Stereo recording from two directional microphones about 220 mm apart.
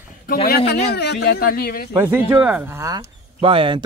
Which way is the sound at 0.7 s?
45° left (ahead or behind).